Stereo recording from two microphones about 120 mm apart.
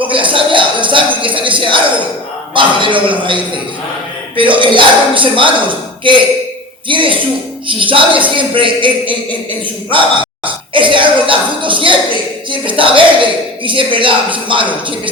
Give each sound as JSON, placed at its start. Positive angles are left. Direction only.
{"t": 0.1, "sound": "a man's voice", "side_deg": -45}